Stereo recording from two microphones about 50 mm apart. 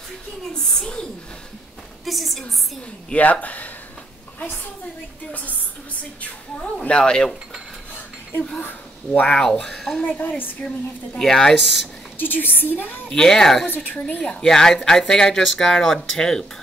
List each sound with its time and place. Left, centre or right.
2.0 s a woman's voice: centre
3.1 s a woman's voice: left
5.3 s a woman's voice: left
6.8 s speech: centre
9.1 s speech: left
9.4 s speech: centre
10.0 s a woman's voice: left
11.1 s speech: centre
12.2 s a woman's voice: left
13.1 s speech: centre